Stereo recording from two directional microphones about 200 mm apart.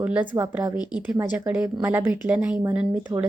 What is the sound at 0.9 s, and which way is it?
Speech, 5° right (ahead or behind).